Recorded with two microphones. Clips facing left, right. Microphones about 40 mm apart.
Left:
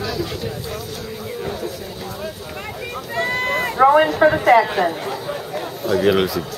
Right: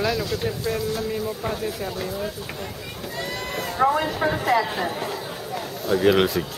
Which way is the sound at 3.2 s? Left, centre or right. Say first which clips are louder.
Left 10 dB; left.